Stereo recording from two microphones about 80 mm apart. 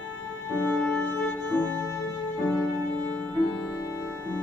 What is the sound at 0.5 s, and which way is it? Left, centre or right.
Music, left.